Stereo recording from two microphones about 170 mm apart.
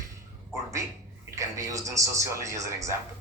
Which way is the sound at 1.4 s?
20° right (ahead or behind).